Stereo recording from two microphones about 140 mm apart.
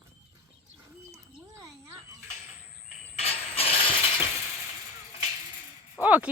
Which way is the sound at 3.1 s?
45° left (ahead or behind).